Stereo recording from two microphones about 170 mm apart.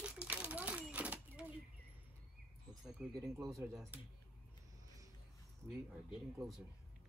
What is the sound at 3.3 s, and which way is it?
Speech, 15° right (ahead or behind).